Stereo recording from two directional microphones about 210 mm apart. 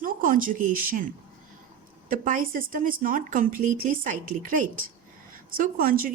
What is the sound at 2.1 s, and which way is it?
A woman's voice, 40° right (ahead or behind).